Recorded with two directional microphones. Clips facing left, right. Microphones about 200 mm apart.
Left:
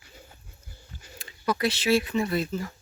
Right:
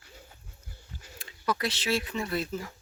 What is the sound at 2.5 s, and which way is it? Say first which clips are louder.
Speech: left 3 dB; 10° right (ahead or behind).